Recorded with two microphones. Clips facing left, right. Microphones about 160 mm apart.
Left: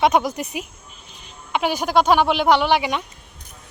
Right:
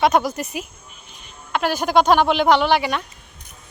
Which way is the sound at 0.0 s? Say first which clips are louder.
Even; 15° left (ahead or behind).